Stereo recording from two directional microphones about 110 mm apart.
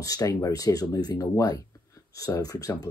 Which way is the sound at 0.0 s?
35° left (ahead or behind).